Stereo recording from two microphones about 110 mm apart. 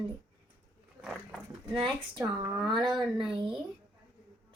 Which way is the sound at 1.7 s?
50° right (ahead or behind).